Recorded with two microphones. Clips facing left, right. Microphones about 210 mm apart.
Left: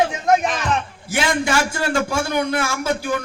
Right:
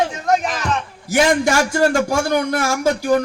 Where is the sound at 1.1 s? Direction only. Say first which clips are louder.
Right 5 dB; 40° right (ahead or behind).